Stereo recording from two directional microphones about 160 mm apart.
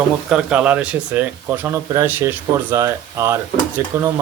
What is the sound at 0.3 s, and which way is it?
Speech, 5° right (ahead or behind).